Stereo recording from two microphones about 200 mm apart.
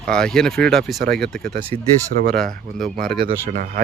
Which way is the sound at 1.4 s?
50° right (ahead or behind).